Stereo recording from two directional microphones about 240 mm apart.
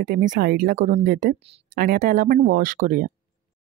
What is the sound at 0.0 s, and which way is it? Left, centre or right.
Speech, right.